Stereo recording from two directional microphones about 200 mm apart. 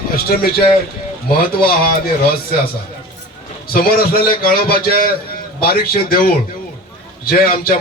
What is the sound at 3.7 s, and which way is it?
A man's voice, 45° left (ahead or behind).